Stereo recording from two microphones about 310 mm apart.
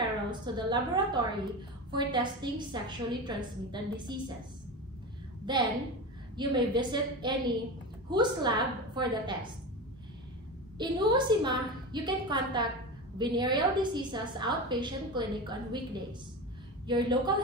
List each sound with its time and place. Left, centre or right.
0.3 s a woman's voice: centre
5.4 s a woman's voice: centre
10.8 s a woman's voice: centre